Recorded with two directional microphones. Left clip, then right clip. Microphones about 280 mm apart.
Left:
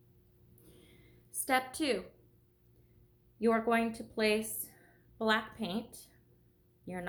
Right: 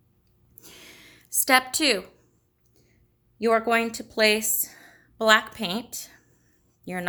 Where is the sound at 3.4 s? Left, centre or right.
Right.